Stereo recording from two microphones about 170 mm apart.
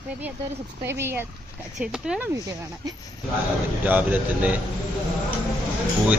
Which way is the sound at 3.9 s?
10° right (ahead or behind).